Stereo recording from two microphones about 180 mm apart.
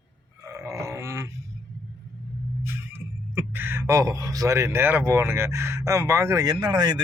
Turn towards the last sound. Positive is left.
turn(degrees=-20)  # may be behind; listen again after turning